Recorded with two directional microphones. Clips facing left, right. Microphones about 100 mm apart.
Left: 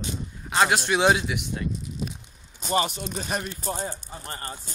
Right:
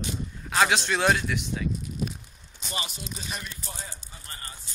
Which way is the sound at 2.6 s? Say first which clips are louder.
Left 11 dB; 45° left (ahead or behind).